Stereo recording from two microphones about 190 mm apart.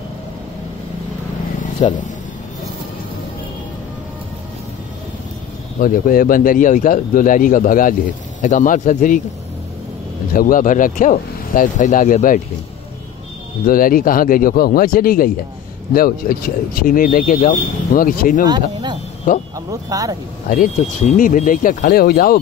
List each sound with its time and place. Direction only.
1.8 s a man's voice: 35° left (ahead or behind)
5.8 s a man's voice: 45° left (ahead or behind)
10.3 s speech: 45° left (ahead or behind)
13.7 s speech: 50° left (ahead or behind)
18.5 s speech: 20° right (ahead or behind)
19.3 s speech: 45° left (ahead or behind)
19.7 s speech: 20° right (ahead or behind)
20.4 s speech: 45° left (ahead or behind)